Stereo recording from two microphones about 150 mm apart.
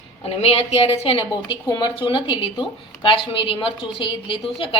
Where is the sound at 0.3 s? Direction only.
40° left (ahead or behind).